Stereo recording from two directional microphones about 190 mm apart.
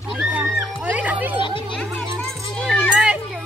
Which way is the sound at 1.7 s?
5° left (ahead or behind).